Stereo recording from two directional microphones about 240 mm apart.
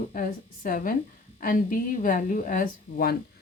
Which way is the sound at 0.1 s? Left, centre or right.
Left.